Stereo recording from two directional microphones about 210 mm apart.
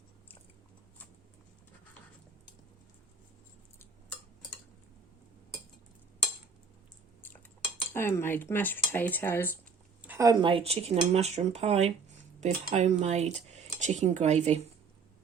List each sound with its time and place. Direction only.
7.9 s speech: 10° left (ahead or behind)
10.0 s speech: 10° right (ahead or behind); by 14.6 s 30° right (ahead or behind)